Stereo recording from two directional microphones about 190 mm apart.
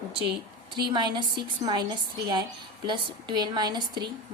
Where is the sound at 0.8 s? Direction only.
25° right (ahead or behind).